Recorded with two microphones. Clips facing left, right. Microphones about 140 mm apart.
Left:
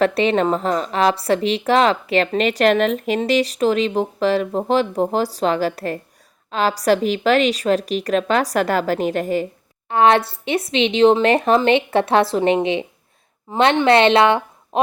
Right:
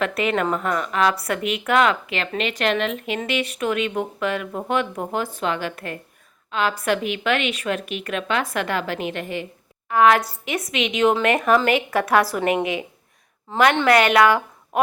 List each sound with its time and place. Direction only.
0.0 s speech: 30° left (ahead or behind)
9.9 s a woman's voice: 30° left (ahead or behind)